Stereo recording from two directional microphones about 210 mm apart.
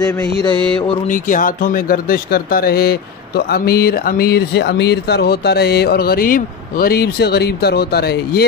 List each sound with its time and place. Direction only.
0.5 s mantra: 5° left (ahead or behind)
1.0 s speech: 40° left (ahead or behind)